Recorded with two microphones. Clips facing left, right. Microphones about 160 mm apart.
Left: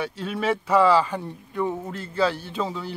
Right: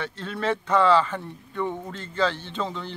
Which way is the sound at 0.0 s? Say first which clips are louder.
Left 2 dB; 10° left (ahead or behind).